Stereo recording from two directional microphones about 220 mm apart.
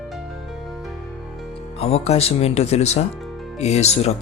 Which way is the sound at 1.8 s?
30° left (ahead or behind).